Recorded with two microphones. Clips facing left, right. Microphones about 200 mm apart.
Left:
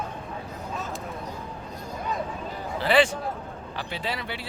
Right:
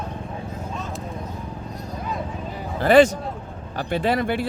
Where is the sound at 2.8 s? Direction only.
45° right (ahead or behind).